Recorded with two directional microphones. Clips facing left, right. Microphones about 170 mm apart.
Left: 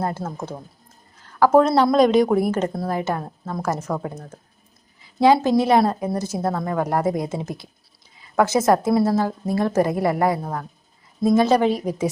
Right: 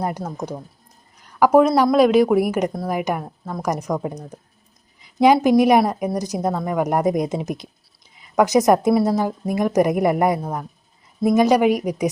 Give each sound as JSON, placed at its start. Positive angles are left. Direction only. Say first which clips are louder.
{"t": 0.0, "sound": "a woman's voice", "louder": "right 1 dB", "side_deg": -15}